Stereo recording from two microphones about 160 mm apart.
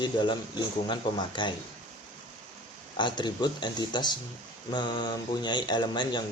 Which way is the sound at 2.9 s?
30° left (ahead or behind).